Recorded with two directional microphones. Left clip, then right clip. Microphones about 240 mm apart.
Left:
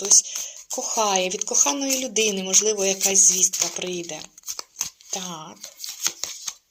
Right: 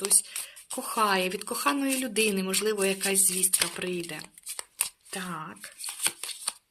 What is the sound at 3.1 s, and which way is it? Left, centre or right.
Speech, right.